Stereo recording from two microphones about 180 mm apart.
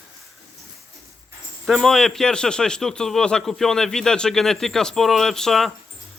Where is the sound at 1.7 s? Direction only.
Centre (ahead or behind).